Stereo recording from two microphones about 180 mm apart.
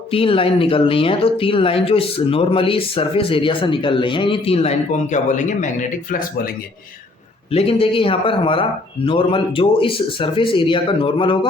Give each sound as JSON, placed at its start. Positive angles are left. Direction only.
{"t": 0.1, "sound": "speech", "side_deg": 30}
{"t": 7.5, "sound": "speech", "side_deg": 30}